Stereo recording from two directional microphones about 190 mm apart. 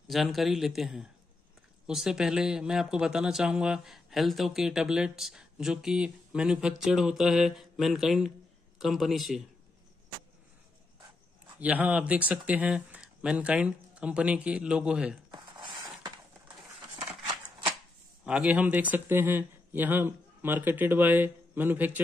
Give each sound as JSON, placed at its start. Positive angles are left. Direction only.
{"t": 0.1, "sound": "speech", "side_deg": 0}
{"t": 11.6, "sound": "speech", "side_deg": -5}
{"t": 15.3, "sound": "a sound", "side_deg": -25}
{"t": 17.1, "sound": "shuffling cards", "side_deg": -25}
{"t": 18.2, "sound": "speech", "side_deg": -5}